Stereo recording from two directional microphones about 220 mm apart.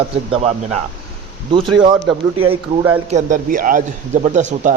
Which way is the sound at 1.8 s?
20° right (ahead or behind).